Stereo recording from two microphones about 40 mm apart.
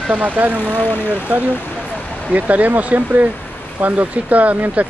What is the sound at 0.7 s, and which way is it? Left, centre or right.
Speech, left.